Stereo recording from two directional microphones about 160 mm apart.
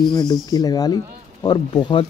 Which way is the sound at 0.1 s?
25° left (ahead or behind).